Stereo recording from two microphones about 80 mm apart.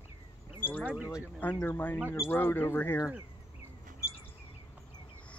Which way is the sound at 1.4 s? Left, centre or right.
Left.